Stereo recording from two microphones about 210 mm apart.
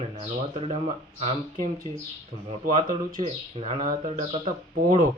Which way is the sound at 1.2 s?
35° right (ahead or behind).